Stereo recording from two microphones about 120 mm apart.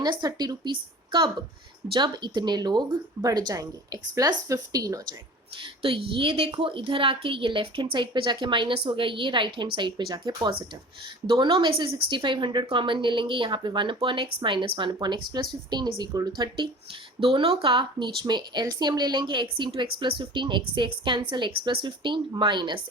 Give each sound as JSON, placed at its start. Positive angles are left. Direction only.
{"t": 0.0, "sound": "speech", "side_deg": -35}
{"t": 5.8, "sound": "a woman's voice", "side_deg": -50}
{"t": 17.3, "sound": "speech", "side_deg": -50}